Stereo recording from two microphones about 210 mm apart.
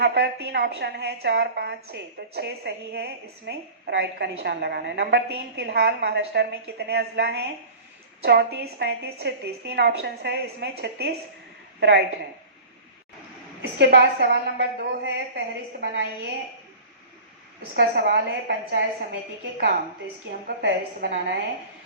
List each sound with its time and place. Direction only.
0.0 s a woman's voice: 50° right (ahead or behind)
13.6 s a woman's voice: 55° right (ahead or behind)
17.7 s a woman's voice: 55° right (ahead or behind)
20.6 s a woman's voice: 55° right (ahead or behind)